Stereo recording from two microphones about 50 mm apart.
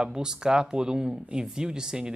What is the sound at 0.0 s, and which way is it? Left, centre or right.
Speech, centre.